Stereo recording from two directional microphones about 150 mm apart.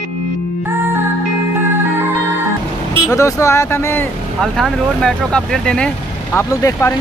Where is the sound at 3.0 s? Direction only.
20° left (ahead or behind).